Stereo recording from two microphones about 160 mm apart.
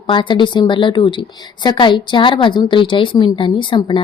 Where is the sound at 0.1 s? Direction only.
30° left (ahead or behind).